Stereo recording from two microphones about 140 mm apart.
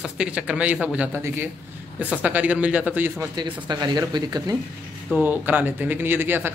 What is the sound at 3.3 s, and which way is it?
Speech, 30° right (ahead or behind).